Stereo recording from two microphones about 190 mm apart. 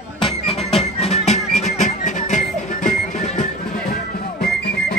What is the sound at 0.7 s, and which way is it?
Music, 35° left (ahead or behind).